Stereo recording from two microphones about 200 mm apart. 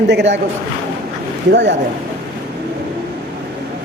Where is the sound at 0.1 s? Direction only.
60° right (ahead or behind).